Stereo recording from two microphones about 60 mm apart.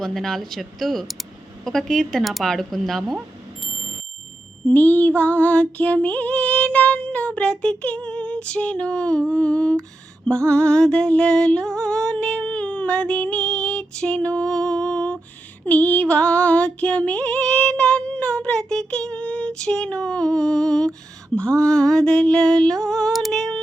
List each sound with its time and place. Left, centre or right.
0.0 s speech: centre
4.7 s female singing: left
10.2 s music: centre
15.6 s female singing: left
21.3 s a sound: centre
23.1 s humming: centre